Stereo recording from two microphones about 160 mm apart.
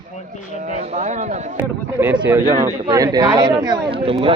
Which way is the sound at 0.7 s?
45° right (ahead or behind).